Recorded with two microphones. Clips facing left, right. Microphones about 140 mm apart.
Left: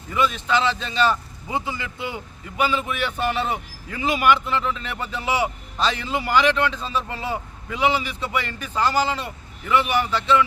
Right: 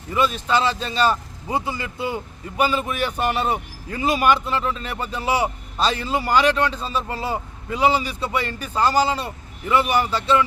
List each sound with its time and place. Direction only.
0.1 s speech: 35° right (ahead or behind)